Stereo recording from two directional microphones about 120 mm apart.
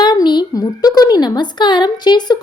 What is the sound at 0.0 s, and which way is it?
A woman's voice, 35° left (ahead or behind).